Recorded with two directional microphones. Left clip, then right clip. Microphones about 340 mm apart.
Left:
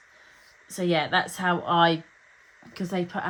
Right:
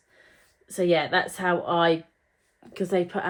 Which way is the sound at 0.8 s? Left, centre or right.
Centre.